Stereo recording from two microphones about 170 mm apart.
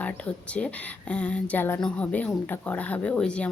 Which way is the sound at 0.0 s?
10° left (ahead or behind).